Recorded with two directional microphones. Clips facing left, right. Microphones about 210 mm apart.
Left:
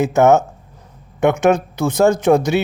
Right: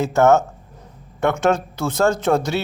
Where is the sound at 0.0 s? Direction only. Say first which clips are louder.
Left 2 dB; 20° left (ahead or behind).